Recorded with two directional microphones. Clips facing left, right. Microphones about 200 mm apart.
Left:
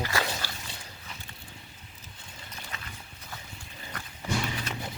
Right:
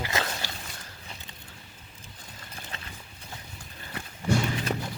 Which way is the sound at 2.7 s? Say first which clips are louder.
Even; 30° right (ahead or behind).